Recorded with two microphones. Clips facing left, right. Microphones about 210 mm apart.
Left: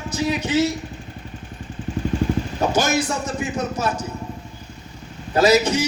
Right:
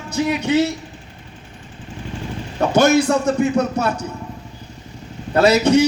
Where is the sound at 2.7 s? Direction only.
60° right (ahead or behind).